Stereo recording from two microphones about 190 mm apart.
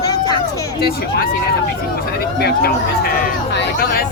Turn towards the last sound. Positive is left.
turn(degrees=50)  # may be behind; listen again after turning